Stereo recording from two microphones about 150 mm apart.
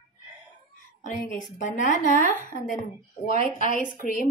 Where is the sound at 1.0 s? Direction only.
60° left (ahead or behind).